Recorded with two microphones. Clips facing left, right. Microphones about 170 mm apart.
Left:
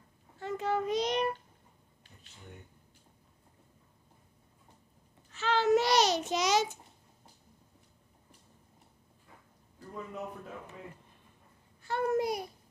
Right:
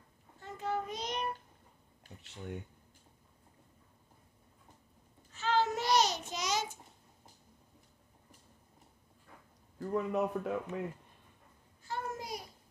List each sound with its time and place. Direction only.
0.4 s child singing: 90° left
5.3 s child singing: 80° left
9.8 s a man's voice: 75° right (ahead or behind)
11.8 s babbling: 65° left (ahead or behind)